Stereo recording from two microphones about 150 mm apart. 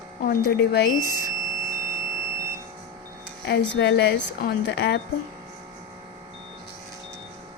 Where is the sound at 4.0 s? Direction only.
90° left.